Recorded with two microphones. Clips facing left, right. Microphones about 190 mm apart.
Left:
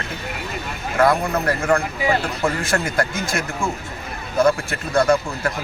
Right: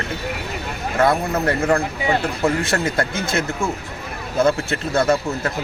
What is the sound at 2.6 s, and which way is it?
Speech, 25° right (ahead or behind).